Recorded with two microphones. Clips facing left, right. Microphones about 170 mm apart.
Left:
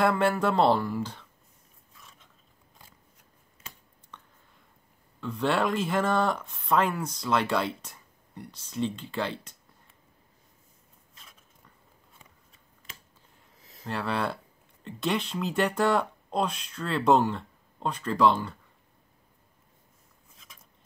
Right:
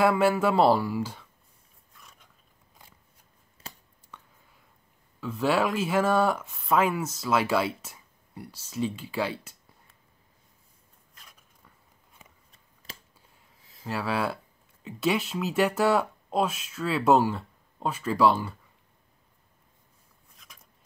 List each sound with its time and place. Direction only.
0.0 s speech: 5° right (ahead or behind)
2.0 s dog: centre (ahead or behind)
3.6 s a sound: 35° right (ahead or behind)
4.1 s whispering: 10° right (ahead or behind)
5.2 s speech: 5° right (ahead or behind)
12.9 s finger snapping: 35° right (ahead or behind)
13.8 s speech: 5° right (ahead or behind)